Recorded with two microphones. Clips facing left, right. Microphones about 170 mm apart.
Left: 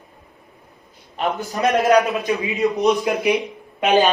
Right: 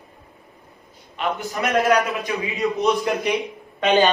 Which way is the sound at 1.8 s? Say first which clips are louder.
Left 2 dB; 20° left (ahead or behind).